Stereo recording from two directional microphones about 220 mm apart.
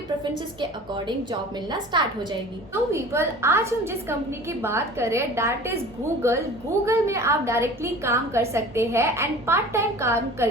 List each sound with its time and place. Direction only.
0.6 s a woman's voice: 20° right (ahead or behind)